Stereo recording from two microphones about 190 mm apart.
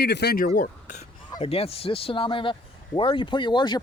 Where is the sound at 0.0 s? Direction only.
60° left (ahead or behind); by 1.0 s 45° left (ahead or behind).